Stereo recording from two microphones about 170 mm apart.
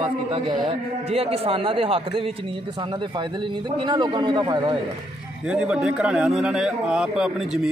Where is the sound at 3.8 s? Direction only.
25° right (ahead or behind).